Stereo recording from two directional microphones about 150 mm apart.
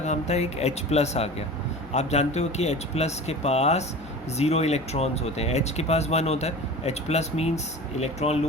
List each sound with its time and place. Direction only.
0.0 s speech: 50° left (ahead or behind)